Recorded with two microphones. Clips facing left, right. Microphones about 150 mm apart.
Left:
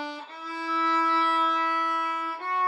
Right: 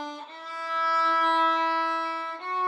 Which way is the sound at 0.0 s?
5° left (ahead or behind).